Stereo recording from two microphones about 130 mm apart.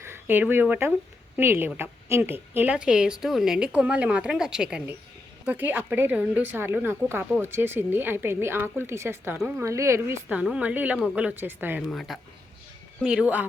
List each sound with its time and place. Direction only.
0.0 s a woman's voice: 15° right (ahead or behind)
10.3 s a woman's voice: 10° right (ahead or behind)
11.8 s a woman's voice: centre (ahead or behind)